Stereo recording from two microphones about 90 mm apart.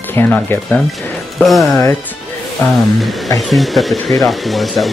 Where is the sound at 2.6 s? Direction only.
25° left (ahead or behind).